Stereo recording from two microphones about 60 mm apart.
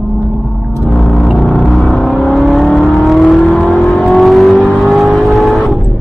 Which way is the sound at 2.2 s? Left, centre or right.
Centre.